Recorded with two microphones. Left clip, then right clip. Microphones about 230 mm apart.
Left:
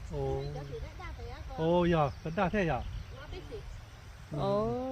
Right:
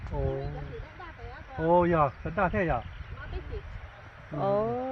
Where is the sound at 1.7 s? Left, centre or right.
Right.